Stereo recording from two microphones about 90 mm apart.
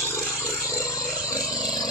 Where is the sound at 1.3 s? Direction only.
45° left (ahead or behind).